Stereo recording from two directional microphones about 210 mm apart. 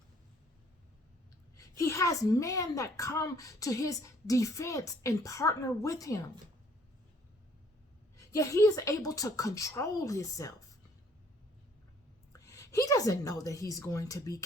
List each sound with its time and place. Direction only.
1.5 s a woman's voice: 15° left (ahead or behind)
8.1 s a woman's voice: 15° left (ahead or behind)
12.3 s a woman's voice: 15° left (ahead or behind)